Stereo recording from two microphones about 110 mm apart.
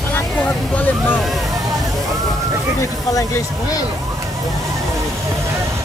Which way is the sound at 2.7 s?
30° left (ahead or behind).